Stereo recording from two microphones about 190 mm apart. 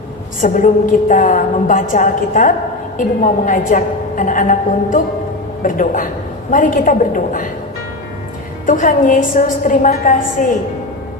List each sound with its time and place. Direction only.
0.4 s a woman's voice: 40° left (ahead or behind)
8.6 s a woman's voice: 45° left (ahead or behind)